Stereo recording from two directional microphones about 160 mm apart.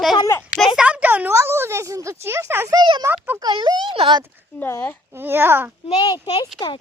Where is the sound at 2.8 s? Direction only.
30° right (ahead or behind).